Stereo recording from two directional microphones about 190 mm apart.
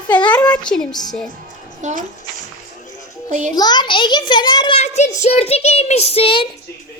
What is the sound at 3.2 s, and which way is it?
Speech, 40° right (ahead or behind).